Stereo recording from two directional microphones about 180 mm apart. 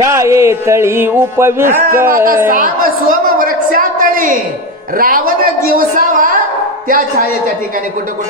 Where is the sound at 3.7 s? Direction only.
50° right (ahead or behind).